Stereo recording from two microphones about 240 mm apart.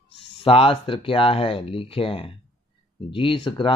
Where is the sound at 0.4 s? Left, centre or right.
Left.